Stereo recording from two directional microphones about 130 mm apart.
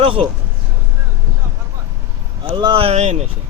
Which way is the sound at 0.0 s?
45° right (ahead or behind).